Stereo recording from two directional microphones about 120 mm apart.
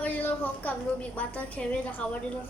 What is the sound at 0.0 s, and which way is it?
A woman's voice, 15° left (ahead or behind).